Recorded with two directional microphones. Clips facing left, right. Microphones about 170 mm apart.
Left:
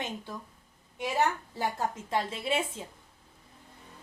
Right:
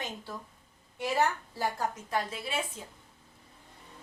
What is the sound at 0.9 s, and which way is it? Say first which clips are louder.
A woman's voice: even; 20° left (ahead or behind).